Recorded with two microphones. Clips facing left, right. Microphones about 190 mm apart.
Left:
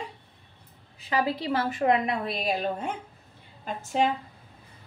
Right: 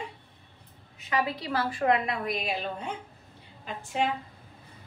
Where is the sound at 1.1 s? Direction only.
30° left (ahead or behind).